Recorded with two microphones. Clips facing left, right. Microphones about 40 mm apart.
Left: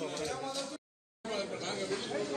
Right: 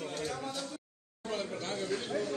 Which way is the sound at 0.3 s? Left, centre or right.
Centre.